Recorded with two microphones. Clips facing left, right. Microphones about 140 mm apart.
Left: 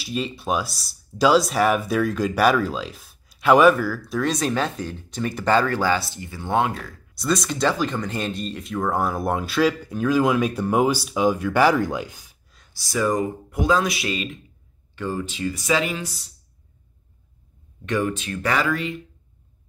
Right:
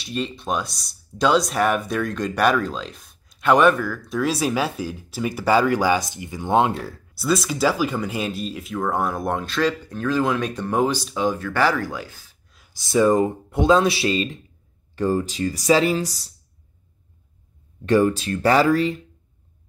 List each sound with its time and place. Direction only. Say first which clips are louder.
0.0 s speech: even; 5° left (ahead or behind); by 7.0 s 30° right (ahead or behind)
7.2 s speech: right 1 dB; 5° right (ahead or behind); by 12.4 s 15° left (ahead or behind)
12.7 s speech: right 5 dB; 25° right (ahead or behind)
17.8 s speech: right 6 dB; 35° right (ahead or behind)